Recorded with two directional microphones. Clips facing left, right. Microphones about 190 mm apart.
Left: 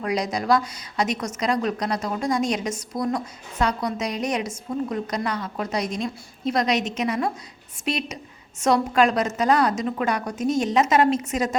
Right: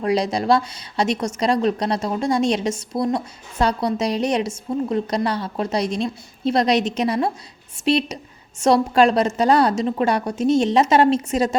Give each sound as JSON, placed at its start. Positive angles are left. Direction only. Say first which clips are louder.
{"t": 0.0, "sound": "a woman's voice", "louder": "right 5 dB", "side_deg": -30}